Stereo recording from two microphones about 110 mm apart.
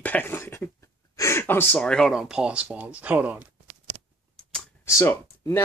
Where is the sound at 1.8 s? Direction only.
5° left (ahead or behind).